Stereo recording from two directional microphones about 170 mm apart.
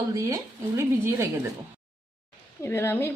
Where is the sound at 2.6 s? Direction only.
15° left (ahead or behind).